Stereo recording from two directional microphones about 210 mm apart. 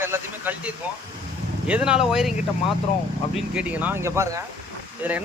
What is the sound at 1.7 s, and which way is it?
Speech, 5° right (ahead or behind).